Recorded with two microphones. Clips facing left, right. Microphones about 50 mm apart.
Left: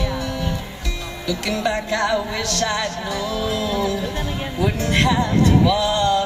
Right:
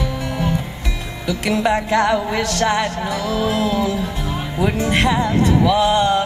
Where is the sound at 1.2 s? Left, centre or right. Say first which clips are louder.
Right 4 dB; right.